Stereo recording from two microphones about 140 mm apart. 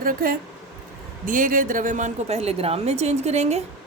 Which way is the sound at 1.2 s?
75° right (ahead or behind).